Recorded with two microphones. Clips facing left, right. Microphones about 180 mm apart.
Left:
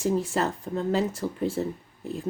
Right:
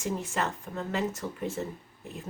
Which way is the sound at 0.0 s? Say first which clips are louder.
Left 6 dB; 35° left (ahead or behind).